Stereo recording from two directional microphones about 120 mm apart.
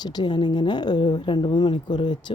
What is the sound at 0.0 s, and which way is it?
A woman's voice, 35° left (ahead or behind).